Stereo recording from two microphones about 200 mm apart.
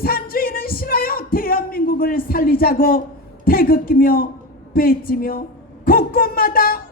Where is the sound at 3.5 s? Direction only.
45° left (ahead or behind).